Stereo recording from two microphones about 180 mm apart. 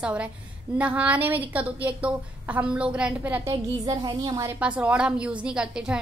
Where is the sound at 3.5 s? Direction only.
25° right (ahead or behind).